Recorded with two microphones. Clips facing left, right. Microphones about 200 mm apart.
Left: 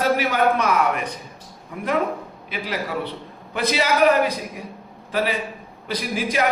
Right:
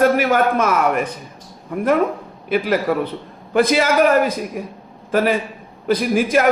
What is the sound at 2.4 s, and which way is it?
Speech, 50° right (ahead or behind).